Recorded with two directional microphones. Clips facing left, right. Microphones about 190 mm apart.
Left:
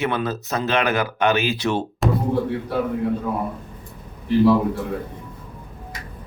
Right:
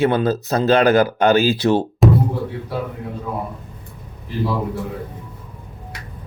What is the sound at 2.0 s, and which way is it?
Music, centre (ahead or behind).